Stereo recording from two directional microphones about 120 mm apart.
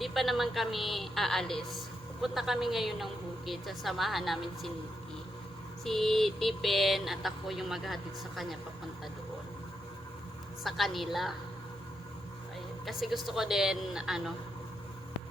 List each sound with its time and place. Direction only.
0.0 s a woman's voice: centre (ahead or behind)
5.8 s a woman's voice: centre (ahead or behind)
10.6 s a woman's voice: centre (ahead or behind)
12.8 s a woman's voice: centre (ahead or behind)